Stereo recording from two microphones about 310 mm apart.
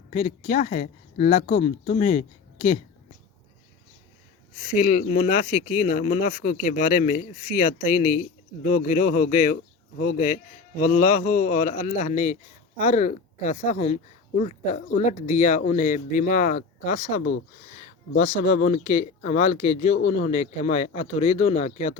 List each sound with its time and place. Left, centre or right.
0.1 s a man's voice: left
4.8 s a man's voice: left
18.3 s a man's voice: left